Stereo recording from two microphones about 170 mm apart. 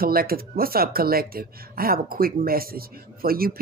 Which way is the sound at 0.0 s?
60° right (ahead or behind).